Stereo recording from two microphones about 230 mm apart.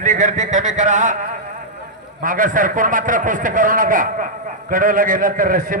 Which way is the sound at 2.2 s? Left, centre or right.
Right.